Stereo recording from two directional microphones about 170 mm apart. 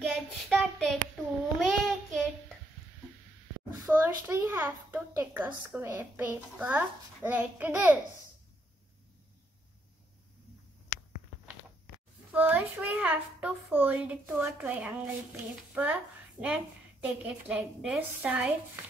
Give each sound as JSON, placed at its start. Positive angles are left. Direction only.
{"t": 0.0, "sound": "child singing", "side_deg": 5}
{"t": 3.8, "sound": "a child's voice", "side_deg": -15}
{"t": 12.3, "sound": "a child's voice", "side_deg": -10}